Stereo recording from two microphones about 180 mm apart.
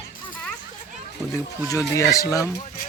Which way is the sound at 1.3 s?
20° left (ahead or behind).